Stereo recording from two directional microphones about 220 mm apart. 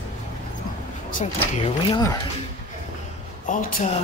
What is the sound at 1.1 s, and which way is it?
Speech, 35° left (ahead or behind).